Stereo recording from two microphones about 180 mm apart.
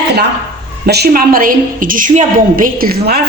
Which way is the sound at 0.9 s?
65° right (ahead or behind).